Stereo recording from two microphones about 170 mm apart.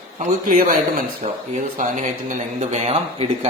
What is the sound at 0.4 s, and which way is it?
Speech, 55° right (ahead or behind).